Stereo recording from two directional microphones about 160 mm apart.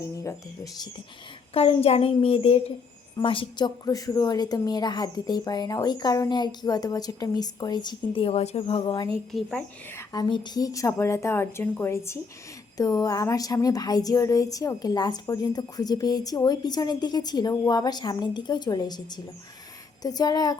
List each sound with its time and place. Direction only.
0.0 s a woman's voice: 20° left (ahead or behind)
1.5 s a child's voice: 40° left (ahead or behind)
9.3 s speech: centre (ahead or behind)
9.9 s a woman's voice: 20° left (ahead or behind)